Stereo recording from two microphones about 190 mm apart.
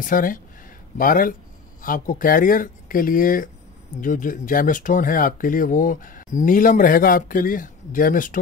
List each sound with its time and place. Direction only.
0.0 s speech: 45° left (ahead or behind)